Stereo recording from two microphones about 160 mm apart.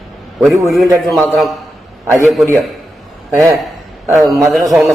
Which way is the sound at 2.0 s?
15° right (ahead or behind).